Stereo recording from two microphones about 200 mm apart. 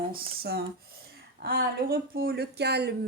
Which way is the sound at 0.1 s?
50° right (ahead or behind).